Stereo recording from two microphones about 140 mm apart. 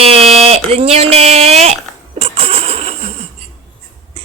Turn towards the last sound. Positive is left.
turn(degrees=-45)  # may be behind; listen again after turning